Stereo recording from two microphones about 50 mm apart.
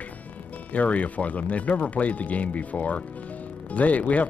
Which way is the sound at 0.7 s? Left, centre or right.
Left.